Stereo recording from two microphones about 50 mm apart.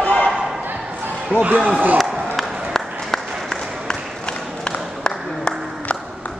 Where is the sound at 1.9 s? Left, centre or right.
Centre.